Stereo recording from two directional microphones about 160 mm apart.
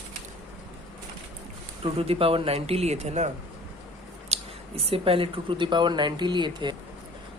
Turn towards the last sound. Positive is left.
turn(degrees=-30)  # may be behind; listen again after turning